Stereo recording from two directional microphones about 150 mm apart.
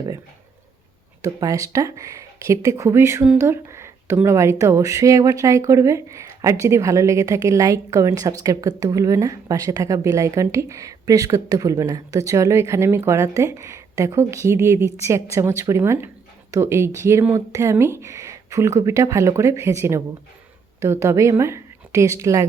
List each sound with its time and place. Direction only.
1.2 s a woman's voice: 20° right (ahead or behind)